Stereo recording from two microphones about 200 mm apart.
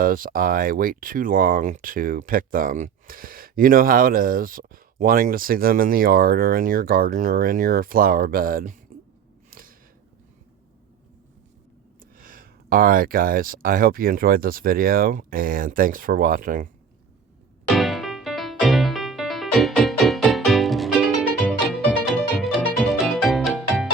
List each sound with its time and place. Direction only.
0.0 s speech: 45° right (ahead or behind)
9.5 s a sound: 45° right (ahead or behind)
12.1 s speech: 45° right (ahead or behind)
17.7 s music: centre (ahead or behind)